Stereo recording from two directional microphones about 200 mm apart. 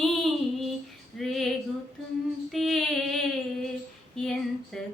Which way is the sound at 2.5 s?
Centre (ahead or behind).